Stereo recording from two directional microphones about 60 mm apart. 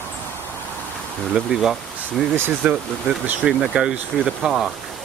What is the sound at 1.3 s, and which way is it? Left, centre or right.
Speech, centre.